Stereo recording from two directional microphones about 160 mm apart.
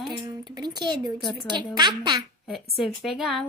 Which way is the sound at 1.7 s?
25° right (ahead or behind).